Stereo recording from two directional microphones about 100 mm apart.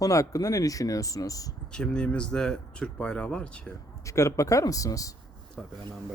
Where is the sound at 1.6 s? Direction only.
10° left (ahead or behind).